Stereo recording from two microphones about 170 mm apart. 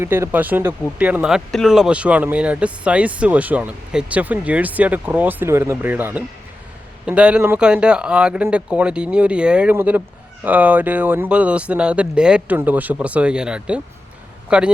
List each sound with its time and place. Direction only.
0.0 s speech: 15° right (ahead or behind)